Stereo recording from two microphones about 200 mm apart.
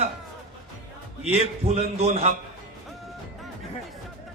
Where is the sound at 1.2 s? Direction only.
35° right (ahead or behind).